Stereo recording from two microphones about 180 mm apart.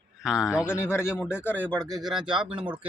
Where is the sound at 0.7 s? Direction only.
15° left (ahead or behind).